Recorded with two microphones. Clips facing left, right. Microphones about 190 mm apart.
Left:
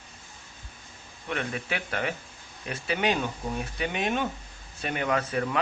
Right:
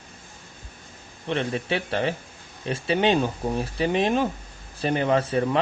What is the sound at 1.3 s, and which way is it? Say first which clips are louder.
Speech: right 6 dB; 30° right (ahead or behind).